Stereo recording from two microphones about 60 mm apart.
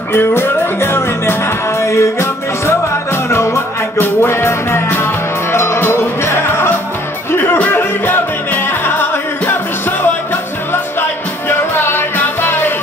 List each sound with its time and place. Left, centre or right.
0.1 s music: left